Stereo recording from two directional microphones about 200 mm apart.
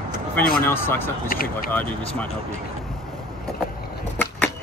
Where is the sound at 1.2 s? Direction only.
45° left (ahead or behind).